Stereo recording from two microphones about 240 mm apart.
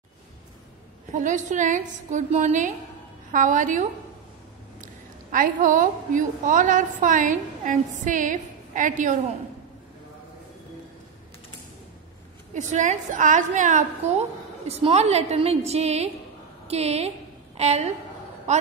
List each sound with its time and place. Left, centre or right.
1.1 s a woman's voice: right
5.3 s a woman's voice: right
12.5 s a woman's voice: right